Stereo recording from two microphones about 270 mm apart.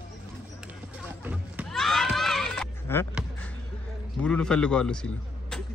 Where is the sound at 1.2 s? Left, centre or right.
Centre.